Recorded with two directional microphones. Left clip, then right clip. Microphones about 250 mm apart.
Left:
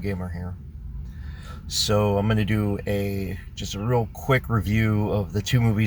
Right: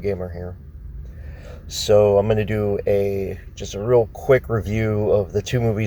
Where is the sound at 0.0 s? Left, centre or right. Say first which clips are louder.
Right 8 dB; centre.